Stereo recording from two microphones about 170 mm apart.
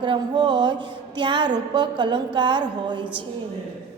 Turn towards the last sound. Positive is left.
turn(degrees=-25)  # may be behind; listen again after turning